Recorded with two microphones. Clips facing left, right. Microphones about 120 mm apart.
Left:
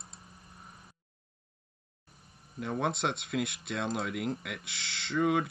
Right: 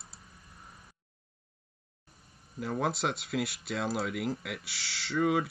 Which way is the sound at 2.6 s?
Centre (ahead or behind).